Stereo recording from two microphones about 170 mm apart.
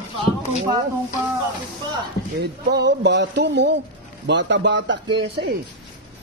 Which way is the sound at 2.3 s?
85° right.